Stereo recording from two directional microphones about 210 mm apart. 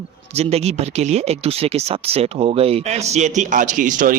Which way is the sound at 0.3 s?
30° right (ahead or behind).